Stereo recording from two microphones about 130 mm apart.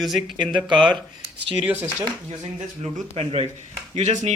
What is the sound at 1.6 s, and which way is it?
Speech, 15° right (ahead or behind).